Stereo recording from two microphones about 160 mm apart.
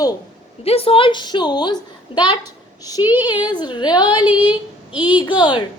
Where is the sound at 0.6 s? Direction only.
35° left (ahead or behind).